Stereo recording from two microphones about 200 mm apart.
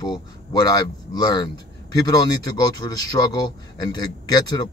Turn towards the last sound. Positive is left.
turn(degrees=20)  # may be behind; listen again after turning